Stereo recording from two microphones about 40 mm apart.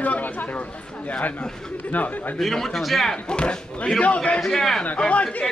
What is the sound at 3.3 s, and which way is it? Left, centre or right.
Speech, left.